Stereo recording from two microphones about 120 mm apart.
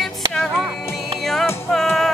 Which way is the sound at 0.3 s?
Centre (ahead or behind).